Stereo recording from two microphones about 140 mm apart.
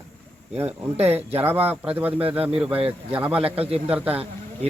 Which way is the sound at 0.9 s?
50° right (ahead or behind).